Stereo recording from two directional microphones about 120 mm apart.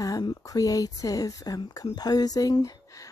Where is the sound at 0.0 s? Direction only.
30° left (ahead or behind).